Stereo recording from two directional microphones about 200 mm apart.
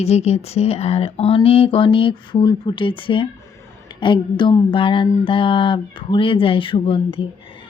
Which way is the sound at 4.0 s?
25° left (ahead or behind).